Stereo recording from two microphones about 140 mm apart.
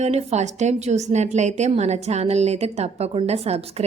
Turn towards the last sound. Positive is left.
turn(degrees=-45)  # may be behind; listen again after turning